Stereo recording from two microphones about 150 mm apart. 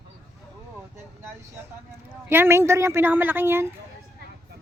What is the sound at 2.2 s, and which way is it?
Speech, 15° right (ahead or behind).